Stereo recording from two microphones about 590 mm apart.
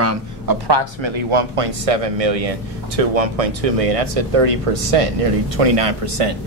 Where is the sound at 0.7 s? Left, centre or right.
Right.